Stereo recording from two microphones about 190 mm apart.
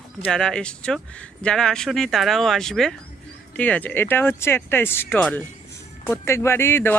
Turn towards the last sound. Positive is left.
turn(degrees=10)  # may be behind; listen again after turning